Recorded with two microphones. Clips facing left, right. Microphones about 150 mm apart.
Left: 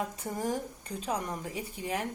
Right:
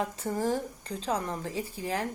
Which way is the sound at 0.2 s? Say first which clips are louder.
Right 4 dB; 15° left (ahead or behind).